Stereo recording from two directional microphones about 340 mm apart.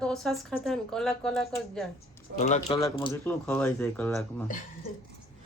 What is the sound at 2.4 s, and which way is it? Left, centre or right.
Speech, left.